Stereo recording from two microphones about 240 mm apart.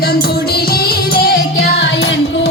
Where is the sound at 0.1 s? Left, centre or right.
Left.